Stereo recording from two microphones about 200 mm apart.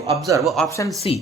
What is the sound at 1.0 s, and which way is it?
Speech, 30° left (ahead or behind).